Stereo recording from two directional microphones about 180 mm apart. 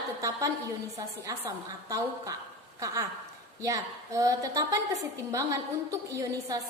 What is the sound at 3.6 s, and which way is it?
A woman's voice, 20° right (ahead or behind).